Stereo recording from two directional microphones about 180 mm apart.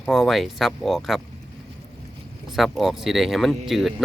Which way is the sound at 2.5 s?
Centre (ahead or behind).